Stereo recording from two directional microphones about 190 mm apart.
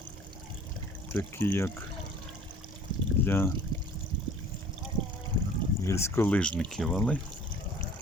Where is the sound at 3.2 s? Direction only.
10° left (ahead or behind).